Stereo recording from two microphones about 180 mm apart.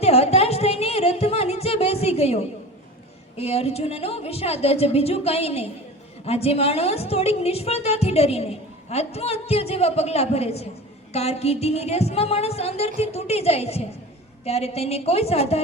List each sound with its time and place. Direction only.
0.0 s music: 35° left (ahead or behind)
3.3 s a woman's voice: 35° left (ahead or behind)